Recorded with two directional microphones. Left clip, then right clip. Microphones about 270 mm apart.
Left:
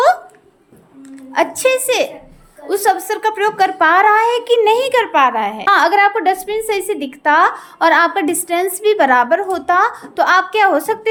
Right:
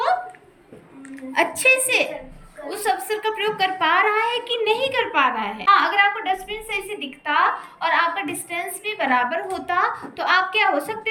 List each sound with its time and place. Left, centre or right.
1.3 s a woman's voice: centre